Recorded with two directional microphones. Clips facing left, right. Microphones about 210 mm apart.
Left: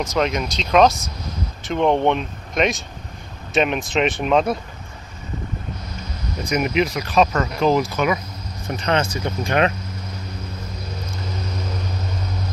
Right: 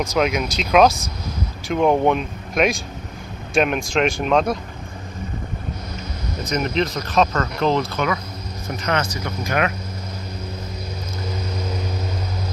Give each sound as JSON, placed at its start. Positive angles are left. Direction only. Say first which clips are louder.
{"t": 0.0, "sound": "speech", "louder": "right 1 dB", "side_deg": 0}
{"t": 6.5, "sound": "speech", "louder": "left 2 dB", "side_deg": 10}
{"t": 8.9, "sound": "speech", "louder": "left 3 dB", "side_deg": 25}